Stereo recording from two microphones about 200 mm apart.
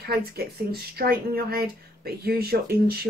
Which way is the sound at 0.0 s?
50° right (ahead or behind).